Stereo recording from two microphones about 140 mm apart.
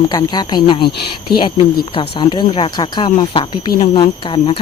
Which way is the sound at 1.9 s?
35° left (ahead or behind).